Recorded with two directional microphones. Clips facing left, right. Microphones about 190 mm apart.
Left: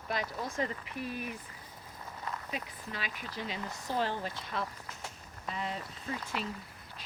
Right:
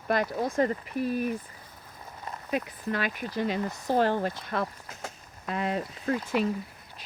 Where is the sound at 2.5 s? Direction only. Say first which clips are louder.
Right 10 dB; 55° right (ahead or behind).